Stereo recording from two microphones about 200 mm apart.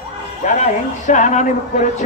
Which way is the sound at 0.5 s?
35° left (ahead or behind).